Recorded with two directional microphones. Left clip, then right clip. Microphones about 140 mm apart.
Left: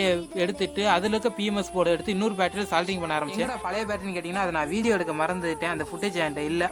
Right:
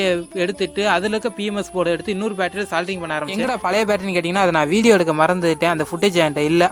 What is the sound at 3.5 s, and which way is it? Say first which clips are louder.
A man's voice: right 10 dB; 70° right (ahead or behind).